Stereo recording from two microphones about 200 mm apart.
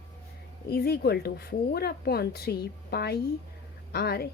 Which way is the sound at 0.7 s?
50° left (ahead or behind).